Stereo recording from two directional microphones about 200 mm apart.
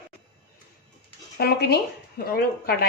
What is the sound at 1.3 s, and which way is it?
Speech, 55° left (ahead or behind).